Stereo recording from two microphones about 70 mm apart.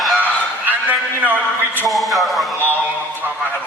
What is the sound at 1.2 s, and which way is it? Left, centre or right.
Speech, right.